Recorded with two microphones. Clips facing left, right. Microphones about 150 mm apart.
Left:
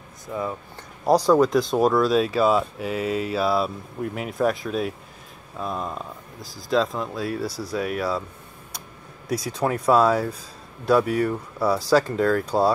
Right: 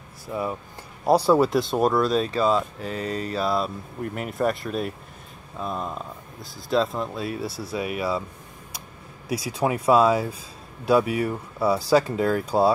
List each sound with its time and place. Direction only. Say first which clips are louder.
0.3 s speech: even; 10° right (ahead or behind)
7.4 s speech: left 2 dB; 30° right (ahead or behind)
7.7 s speech: left 1 dB; centre (ahead or behind)
9.3 s speech: even; 5° right (ahead or behind)